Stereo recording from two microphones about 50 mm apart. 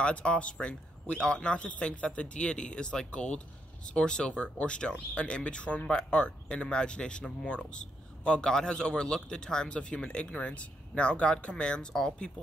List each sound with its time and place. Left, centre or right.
0.0 s a man's voice: left